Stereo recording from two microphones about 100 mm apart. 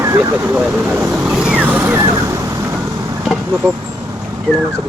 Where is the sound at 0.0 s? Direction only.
30° right (ahead or behind).